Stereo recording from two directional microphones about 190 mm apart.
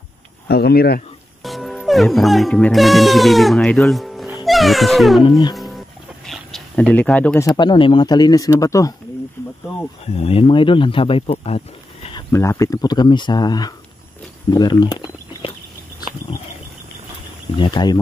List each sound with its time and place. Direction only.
0.5 s speech: 55° left (ahead or behind)
1.4 s speech: centre (ahead or behind); by 8.9 s 15° left (ahead or behind)
10.0 s speech: 30° left (ahead or behind)
14.5 s a sound: 20° left (ahead or behind)
17.6 s speech: 25° left (ahead or behind)